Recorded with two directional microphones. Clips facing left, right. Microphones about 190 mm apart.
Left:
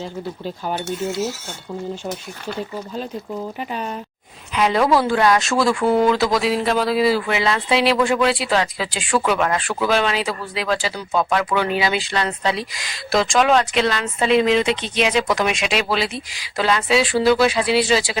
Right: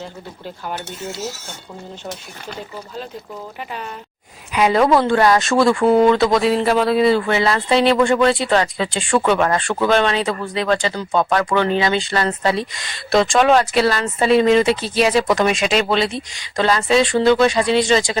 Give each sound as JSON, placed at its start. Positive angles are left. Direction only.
{"t": 3.7, "sound": "speech", "side_deg": 20}
{"t": 4.5, "sound": "speech", "side_deg": -5}